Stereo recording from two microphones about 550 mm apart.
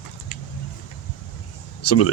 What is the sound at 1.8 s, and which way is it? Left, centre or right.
Speech, left.